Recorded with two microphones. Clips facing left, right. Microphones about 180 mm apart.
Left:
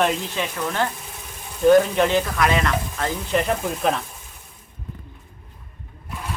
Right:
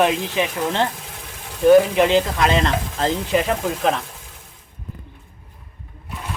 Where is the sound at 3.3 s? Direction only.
5° right (ahead or behind).